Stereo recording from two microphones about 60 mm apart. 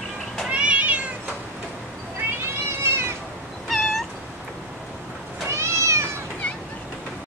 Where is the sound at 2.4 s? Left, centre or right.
Right.